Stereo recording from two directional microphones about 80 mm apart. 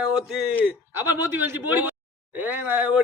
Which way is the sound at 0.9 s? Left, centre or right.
Right.